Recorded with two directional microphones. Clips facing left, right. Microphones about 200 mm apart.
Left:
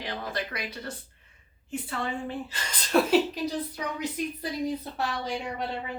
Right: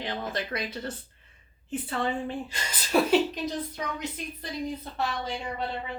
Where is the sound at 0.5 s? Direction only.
30° right (ahead or behind).